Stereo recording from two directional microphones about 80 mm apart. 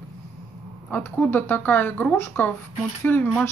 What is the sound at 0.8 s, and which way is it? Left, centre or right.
Speech, centre.